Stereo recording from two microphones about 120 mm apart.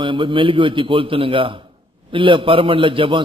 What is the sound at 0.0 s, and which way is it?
A man's voice, 45° right (ahead or behind).